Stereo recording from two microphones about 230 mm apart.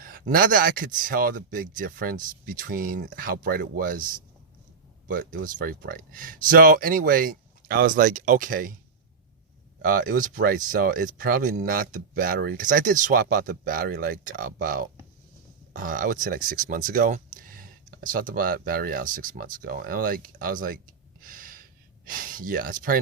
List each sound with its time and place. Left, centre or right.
0.0 s speech: right
5.0 s speech: right
9.8 s speech: right
21.2 s gasp: right
22.0 s speech: right